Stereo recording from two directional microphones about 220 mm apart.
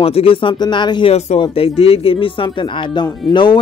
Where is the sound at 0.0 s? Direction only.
25° left (ahead or behind).